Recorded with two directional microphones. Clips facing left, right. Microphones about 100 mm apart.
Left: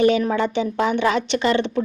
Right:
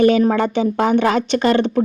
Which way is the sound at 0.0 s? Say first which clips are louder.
Right 4 dB; 45° right (ahead or behind).